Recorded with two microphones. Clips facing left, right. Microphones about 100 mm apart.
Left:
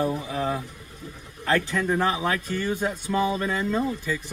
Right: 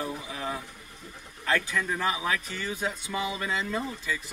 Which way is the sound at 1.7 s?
15° left (ahead or behind).